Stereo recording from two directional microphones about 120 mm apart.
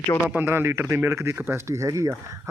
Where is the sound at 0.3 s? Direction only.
15° right (ahead or behind).